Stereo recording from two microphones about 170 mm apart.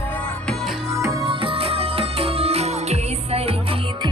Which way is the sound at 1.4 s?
35° right (ahead or behind).